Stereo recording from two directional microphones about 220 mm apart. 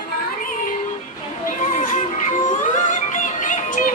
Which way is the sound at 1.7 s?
35° left (ahead or behind).